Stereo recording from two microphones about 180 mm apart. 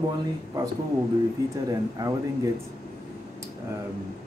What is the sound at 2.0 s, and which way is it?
Speech, 20° right (ahead or behind).